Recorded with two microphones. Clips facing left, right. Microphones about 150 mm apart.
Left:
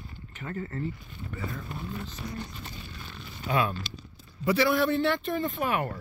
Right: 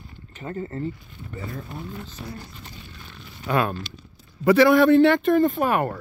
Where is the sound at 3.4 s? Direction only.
60° right (ahead or behind).